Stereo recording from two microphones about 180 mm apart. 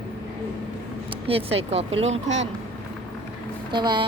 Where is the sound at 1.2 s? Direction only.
35° right (ahead or behind).